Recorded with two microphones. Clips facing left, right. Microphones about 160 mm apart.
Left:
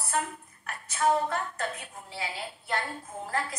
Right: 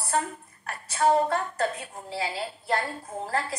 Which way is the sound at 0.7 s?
35° right (ahead or behind).